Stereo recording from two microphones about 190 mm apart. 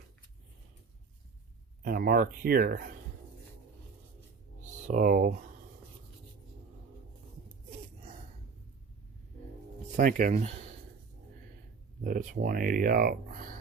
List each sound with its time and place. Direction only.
1.8 s speech: 50° right (ahead or behind)
4.6 s speech: 45° right (ahead or behind)
10.0 s speech: 45° right (ahead or behind)
12.0 s speech: 45° right (ahead or behind)